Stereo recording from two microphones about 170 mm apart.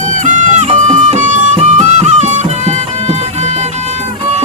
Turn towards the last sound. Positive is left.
turn(degrees=-40)  # may be behind; listen again after turning